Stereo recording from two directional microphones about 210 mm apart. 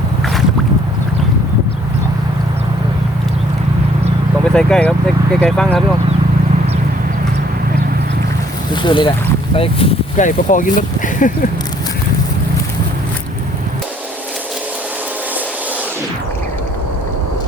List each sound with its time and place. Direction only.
4.4 s speech: 5° left (ahead or behind)
8.7 s speech: 20° left (ahead or behind); by 11.3 s 40° left (ahead or behind)